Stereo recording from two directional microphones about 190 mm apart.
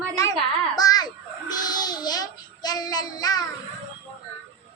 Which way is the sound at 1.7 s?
20° left (ahead or behind).